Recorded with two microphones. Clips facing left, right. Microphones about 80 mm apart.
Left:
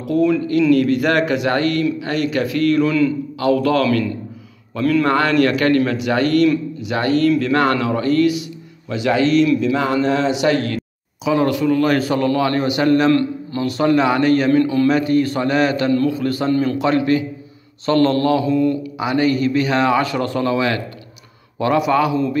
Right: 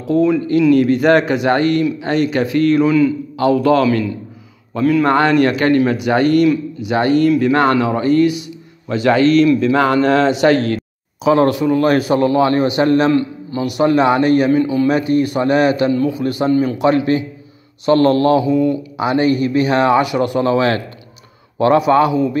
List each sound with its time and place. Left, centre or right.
0.0 s speech: right
5.0 s speech: right
8.8 s a man's voice: right
9.8 s a man's voice: right
11.5 s speech: right
13.1 s speech: centre
14.5 s speech: centre
18.4 s speech: centre
18.9 s speech: right
20.0 s a man's voice: centre